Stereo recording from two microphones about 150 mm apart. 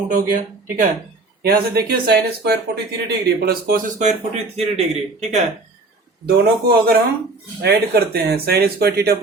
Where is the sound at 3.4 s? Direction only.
80° right.